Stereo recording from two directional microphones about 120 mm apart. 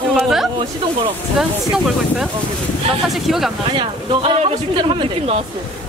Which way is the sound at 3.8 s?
45° right (ahead or behind).